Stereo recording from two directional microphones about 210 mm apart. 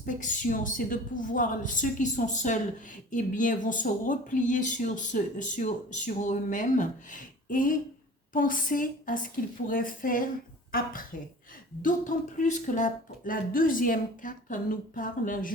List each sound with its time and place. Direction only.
0.0 s a woman's voice: 35° left (ahead or behind)